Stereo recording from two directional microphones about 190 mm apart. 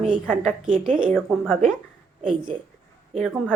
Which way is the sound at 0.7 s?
35° right (ahead or behind).